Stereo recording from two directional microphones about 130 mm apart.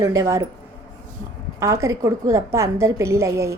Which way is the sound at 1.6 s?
25° right (ahead or behind).